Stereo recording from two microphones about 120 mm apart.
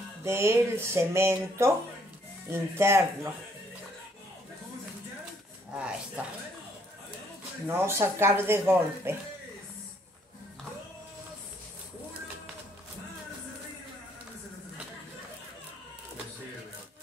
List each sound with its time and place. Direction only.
0.2 s speech: 20° right (ahead or behind)
5.7 s speech: 10° right (ahead or behind)
7.6 s speech: 20° right (ahead or behind)